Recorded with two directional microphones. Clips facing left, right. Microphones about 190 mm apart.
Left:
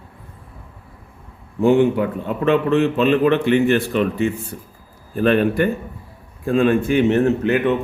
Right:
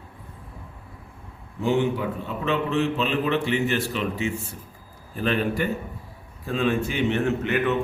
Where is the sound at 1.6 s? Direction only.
55° left (ahead or behind).